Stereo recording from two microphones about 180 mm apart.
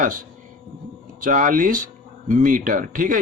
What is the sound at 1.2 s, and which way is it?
Speech, 50° right (ahead or behind).